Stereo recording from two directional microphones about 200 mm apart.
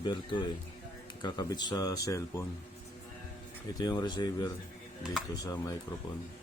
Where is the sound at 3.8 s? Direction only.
20° left (ahead or behind).